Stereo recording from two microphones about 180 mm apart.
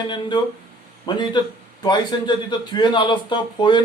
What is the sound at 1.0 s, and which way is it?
Speech, 25° left (ahead or behind).